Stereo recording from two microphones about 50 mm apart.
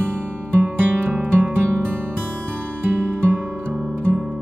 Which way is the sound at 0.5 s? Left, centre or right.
Right.